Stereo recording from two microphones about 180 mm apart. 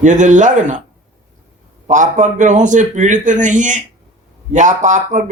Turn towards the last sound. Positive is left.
turn(degrees=-45)  # may be behind; listen again after turning